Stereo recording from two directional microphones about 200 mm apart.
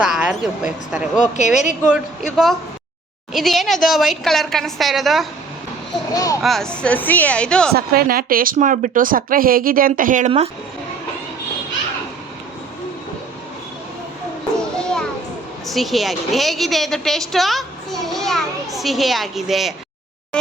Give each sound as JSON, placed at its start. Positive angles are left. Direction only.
{"t": 0.0, "sound": "a woman's voice", "side_deg": -5}
{"t": 1.2, "sound": "speech", "side_deg": 35}
{"t": 1.9, "sound": "a woman's voice", "side_deg": 0}
{"t": 6.4, "sound": "a woman's voice", "side_deg": 0}
{"t": 7.7, "sound": "speech", "side_deg": -50}
{"t": 14.6, "sound": "children playing", "side_deg": 5}
{"t": 15.6, "sound": "a woman's voice", "side_deg": 0}